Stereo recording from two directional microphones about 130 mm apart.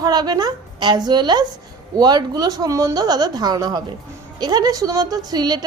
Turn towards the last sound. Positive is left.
turn(degrees=-30)  # may be behind; listen again after turning